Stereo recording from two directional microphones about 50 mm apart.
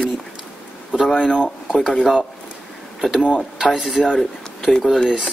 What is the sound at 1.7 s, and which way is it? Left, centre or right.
Speech, centre.